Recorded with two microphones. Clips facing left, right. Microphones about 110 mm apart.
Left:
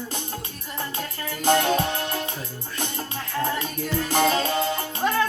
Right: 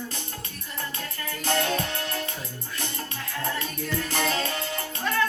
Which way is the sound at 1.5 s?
20° left (ahead or behind).